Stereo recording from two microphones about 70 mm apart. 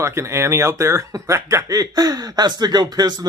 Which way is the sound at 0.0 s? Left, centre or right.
Right.